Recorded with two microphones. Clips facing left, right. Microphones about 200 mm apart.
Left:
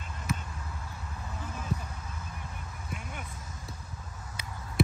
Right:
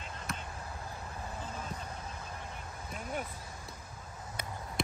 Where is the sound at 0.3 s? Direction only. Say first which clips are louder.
Left 8 dB; 5° left (ahead or behind).